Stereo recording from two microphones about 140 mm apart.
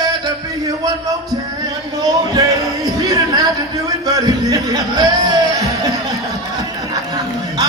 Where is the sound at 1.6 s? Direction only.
25° right (ahead or behind).